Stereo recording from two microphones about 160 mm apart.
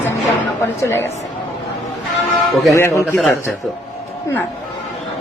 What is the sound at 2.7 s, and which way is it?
Speech, 15° left (ahead or behind).